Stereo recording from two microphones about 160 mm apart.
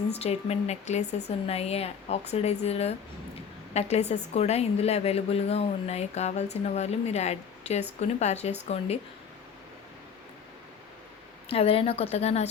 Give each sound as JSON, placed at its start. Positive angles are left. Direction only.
{"t": 0.1, "sound": "a woman's voice", "side_deg": 40}
{"t": 11.4, "sound": "a woman's voice", "side_deg": 35}